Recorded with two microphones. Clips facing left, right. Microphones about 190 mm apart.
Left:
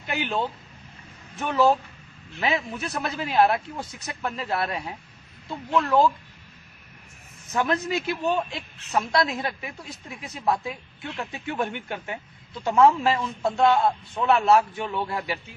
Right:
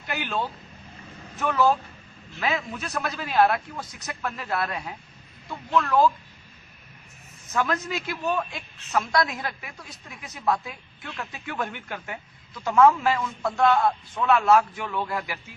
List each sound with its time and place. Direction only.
0.1 s a man's voice: 20° left (ahead or behind)
7.5 s a man's voice: 20° left (ahead or behind)